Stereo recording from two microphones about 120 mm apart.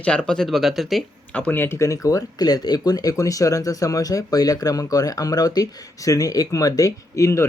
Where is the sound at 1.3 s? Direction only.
15° left (ahead or behind).